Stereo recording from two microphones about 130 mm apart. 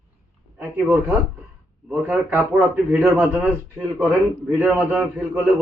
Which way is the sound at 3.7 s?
25° right (ahead or behind).